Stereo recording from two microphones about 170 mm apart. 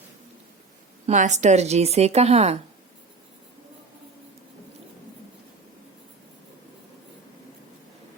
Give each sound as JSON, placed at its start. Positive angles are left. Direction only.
{"t": 1.0, "sound": "speech", "side_deg": -45}